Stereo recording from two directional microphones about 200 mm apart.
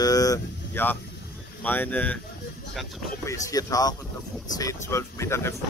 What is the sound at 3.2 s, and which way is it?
Speech, 15° left (ahead or behind).